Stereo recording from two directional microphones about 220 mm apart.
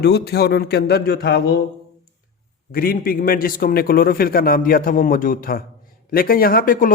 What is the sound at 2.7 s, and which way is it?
Speech, 40° left (ahead or behind).